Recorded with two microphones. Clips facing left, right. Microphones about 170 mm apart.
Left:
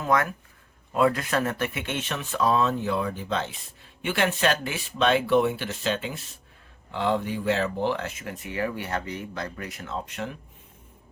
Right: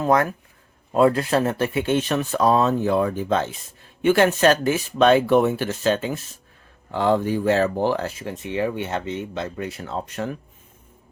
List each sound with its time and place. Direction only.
0.0 s speech: 35° right (ahead or behind)